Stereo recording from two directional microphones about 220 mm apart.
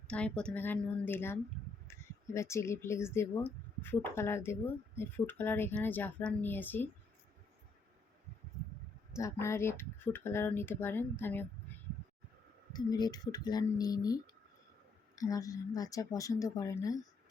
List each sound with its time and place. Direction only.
0.1 s speech: 5° left (ahead or behind)
9.1 s speech: 15° left (ahead or behind)
12.7 s speech: 15° left (ahead or behind)